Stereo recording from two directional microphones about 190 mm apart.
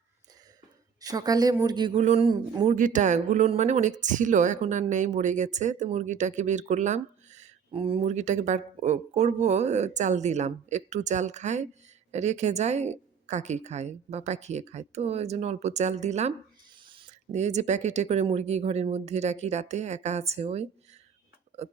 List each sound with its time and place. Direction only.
1.0 s a woman's voice: 20° right (ahead or behind)
2.7 s speech: 45° right (ahead or behind)
21.5 s a sound: 35° right (ahead or behind)